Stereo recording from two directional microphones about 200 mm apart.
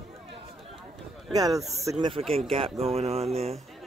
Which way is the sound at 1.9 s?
25° right (ahead or behind).